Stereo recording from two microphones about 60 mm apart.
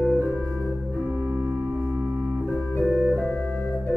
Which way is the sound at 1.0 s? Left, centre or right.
Right.